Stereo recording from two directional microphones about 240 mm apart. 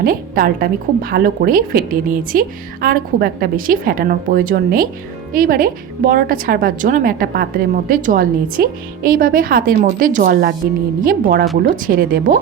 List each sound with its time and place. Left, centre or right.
0.0 s a woman's voice: right